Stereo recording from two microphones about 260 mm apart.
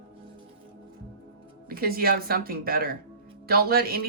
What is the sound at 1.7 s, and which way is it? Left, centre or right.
Speech, right.